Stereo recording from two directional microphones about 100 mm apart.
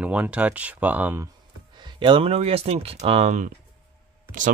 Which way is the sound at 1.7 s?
50° right (ahead or behind).